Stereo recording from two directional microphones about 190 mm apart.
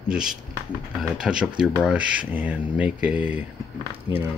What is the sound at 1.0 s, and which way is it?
Speech, 5° right (ahead or behind).